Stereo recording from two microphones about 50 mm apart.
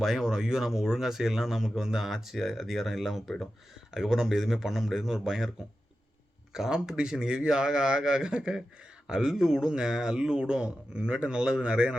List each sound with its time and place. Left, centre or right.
0.0 s speech: centre
6.5 s speech: centre